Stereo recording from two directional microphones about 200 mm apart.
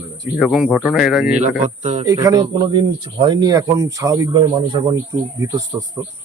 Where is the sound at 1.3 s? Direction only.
35° right (ahead or behind).